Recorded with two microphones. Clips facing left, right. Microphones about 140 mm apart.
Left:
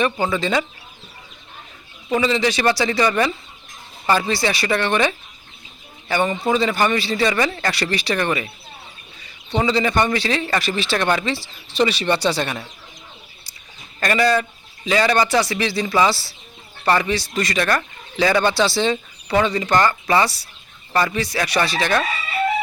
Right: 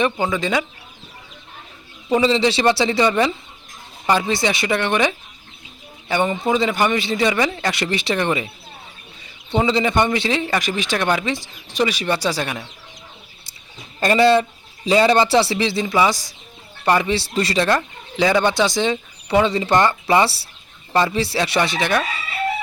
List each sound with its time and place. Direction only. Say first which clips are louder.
0.0 s speech: even; 15° right (ahead or behind)
2.2 s speech: right 2 dB; 25° right (ahead or behind)
9.5 s speech: right 1 dB; 20° right (ahead or behind)
14.0 s speech: right 4 dB; 25° right (ahead or behind)
17.7 s speech: right 1 dB; 15° right (ahead or behind)